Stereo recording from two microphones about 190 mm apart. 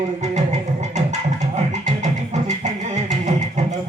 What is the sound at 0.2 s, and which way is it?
Music, 35° right (ahead or behind).